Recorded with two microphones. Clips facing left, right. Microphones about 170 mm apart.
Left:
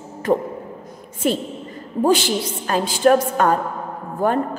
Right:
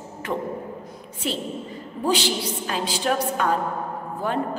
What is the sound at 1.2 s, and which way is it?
A woman's voice, 50° left (ahead or behind).